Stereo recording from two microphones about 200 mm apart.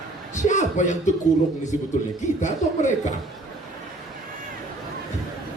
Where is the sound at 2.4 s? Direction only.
35° left (ahead or behind).